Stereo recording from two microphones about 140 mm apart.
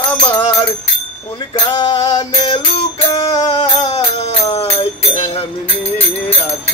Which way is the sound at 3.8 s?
45° left (ahead or behind).